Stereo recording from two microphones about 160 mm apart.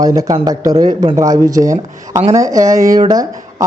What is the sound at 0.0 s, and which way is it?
Speech, 20° right (ahead or behind).